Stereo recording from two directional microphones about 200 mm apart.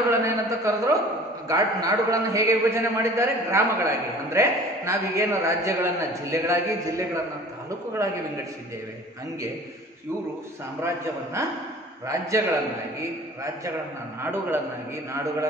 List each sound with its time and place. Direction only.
0.1 s a sound: 15° right (ahead or behind)
1.5 s a man's voice: 15° right (ahead or behind)
11.4 s a man's voice: 15° right (ahead or behind)
14.2 s a man's voice: 10° right (ahead or behind)